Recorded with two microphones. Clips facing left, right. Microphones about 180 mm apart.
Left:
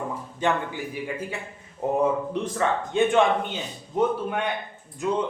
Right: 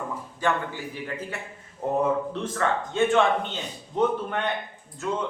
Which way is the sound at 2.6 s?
15° left (ahead or behind).